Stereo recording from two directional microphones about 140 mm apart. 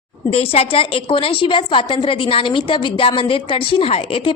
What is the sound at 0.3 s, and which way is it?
A woman's voice, 45° left (ahead or behind).